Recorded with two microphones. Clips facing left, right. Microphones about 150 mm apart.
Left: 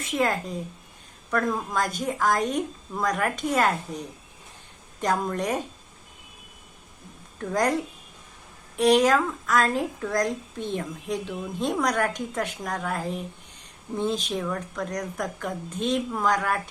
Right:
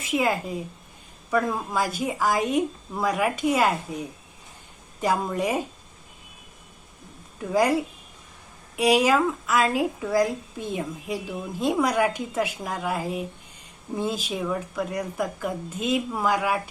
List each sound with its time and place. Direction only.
0.0 s a woman's voice: 5° right (ahead or behind)
7.3 s a woman's voice: 5° right (ahead or behind)